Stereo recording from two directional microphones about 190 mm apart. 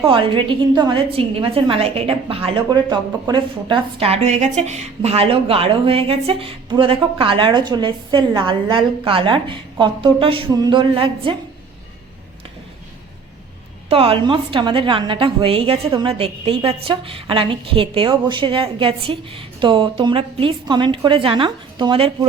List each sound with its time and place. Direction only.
0.1 s a woman's voice: 25° right (ahead or behind)
13.9 s a woman's voice: 30° right (ahead or behind)